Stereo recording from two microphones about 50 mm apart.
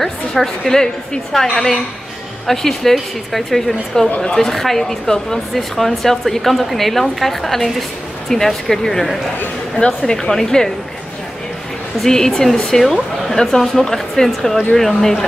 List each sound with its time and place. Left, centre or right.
0.0 s speech: centre
12.0 s speech: centre